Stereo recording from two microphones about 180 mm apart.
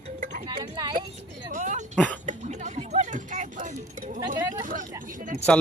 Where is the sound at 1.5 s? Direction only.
45° right (ahead or behind).